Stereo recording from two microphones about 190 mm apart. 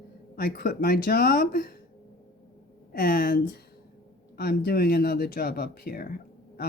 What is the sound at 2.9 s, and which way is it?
Speech, 50° left (ahead or behind).